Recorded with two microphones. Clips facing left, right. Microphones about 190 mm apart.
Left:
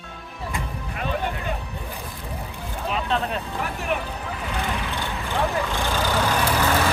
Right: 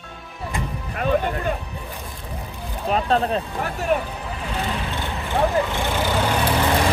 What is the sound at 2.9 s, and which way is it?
Speech, 40° right (ahead or behind).